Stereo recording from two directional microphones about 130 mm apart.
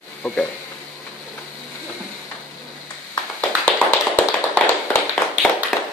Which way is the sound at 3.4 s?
10° left (ahead or behind).